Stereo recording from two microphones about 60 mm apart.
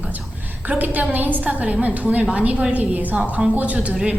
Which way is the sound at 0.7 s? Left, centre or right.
Right.